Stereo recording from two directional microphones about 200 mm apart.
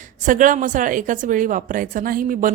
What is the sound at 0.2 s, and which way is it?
A woman's voice, 40° right (ahead or behind).